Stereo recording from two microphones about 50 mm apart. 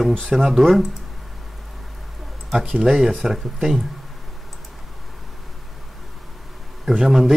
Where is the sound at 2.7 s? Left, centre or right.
Centre.